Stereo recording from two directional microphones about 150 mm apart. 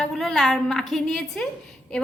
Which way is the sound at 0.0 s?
5° left (ahead or behind).